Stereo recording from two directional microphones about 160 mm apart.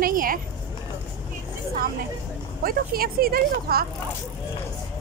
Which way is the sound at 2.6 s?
70° right (ahead or behind).